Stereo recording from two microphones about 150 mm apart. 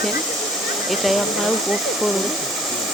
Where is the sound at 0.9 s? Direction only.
Centre (ahead or behind).